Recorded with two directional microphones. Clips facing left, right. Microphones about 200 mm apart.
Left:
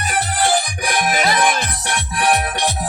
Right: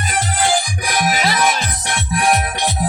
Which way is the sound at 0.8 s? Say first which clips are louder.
Even; 50° left (ahead or behind).